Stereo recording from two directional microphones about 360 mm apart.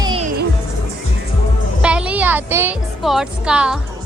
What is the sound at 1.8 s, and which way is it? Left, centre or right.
A woman's voice, centre.